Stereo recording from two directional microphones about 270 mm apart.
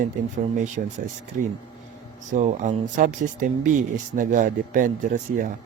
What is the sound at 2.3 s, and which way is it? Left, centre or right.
Speech, right.